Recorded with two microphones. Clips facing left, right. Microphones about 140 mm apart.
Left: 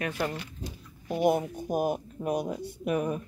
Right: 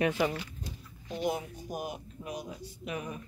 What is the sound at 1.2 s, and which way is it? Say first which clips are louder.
Speech: left 8 dB; 55° left (ahead or behind).